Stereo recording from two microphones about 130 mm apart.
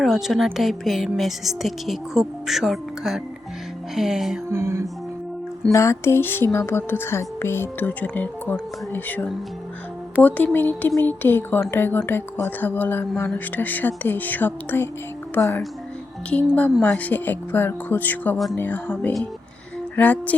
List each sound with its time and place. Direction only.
0.0 s speech: centre (ahead or behind)
4.4 s music: 20° right (ahead or behind)
5.7 s speech: 20° left (ahead or behind)
16.8 s speech: 10° left (ahead or behind)